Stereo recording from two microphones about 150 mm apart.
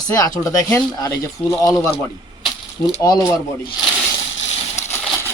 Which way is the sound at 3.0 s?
25° left (ahead or behind).